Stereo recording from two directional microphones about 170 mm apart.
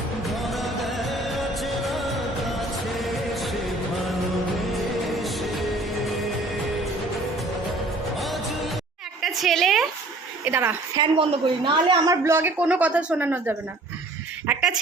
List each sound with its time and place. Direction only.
0.3 s music: centre (ahead or behind)
5.0 s music: centre (ahead or behind)
8.1 s music: centre (ahead or behind)
9.2 s a sound: centre (ahead or behind)
10.4 s a woman's voice: 10° right (ahead or behind)
11.0 s a woman's voice: 30° right (ahead or behind)
12.2 s a woman's voice: 15° right (ahead or behind)
14.4 s a sound: 5° right (ahead or behind)